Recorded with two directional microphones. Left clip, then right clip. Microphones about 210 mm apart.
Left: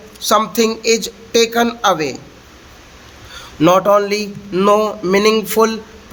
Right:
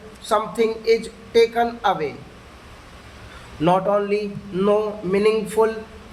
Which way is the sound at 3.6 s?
45° left (ahead or behind).